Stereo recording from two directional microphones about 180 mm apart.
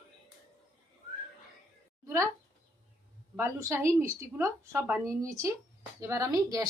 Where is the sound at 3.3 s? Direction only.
15° right (ahead or behind).